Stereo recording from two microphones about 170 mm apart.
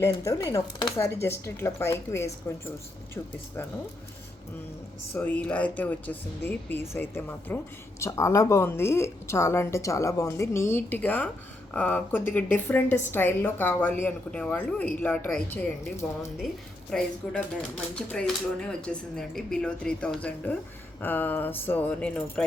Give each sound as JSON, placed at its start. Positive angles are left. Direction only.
{"t": 0.0, "sound": "speech", "side_deg": 15}
{"t": 5.1, "sound": "speech", "side_deg": 10}